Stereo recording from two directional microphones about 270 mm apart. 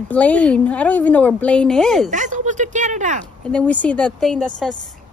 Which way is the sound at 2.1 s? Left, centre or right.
Right.